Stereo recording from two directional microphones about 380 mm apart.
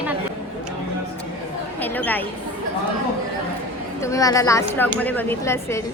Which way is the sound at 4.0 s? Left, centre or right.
Centre.